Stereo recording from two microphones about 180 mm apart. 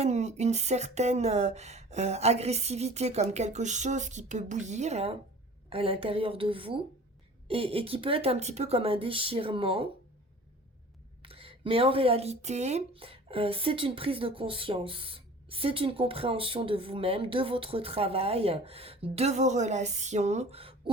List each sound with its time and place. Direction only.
0.0 s speech: 40° right (ahead or behind)
11.2 s speech: 30° right (ahead or behind)